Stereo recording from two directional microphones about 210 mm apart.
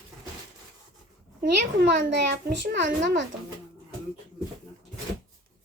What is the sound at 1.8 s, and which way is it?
A child's voice, 60° right (ahead or behind).